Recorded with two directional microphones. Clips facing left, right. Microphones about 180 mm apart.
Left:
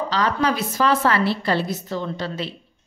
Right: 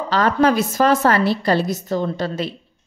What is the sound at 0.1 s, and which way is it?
Speech, 50° right (ahead or behind).